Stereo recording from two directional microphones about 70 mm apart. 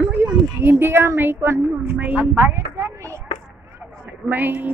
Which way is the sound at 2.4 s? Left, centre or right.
Right.